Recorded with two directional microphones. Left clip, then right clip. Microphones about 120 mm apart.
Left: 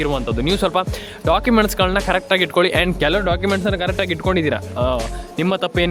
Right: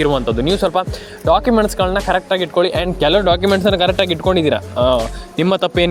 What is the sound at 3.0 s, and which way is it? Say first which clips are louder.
Speech: right 9 dB; 10° right (ahead or behind).